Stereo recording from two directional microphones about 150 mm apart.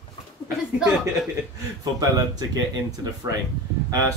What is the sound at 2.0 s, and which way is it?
Speech, 25° right (ahead or behind).